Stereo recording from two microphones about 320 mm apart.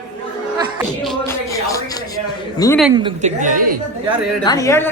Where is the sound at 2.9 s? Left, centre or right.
Centre.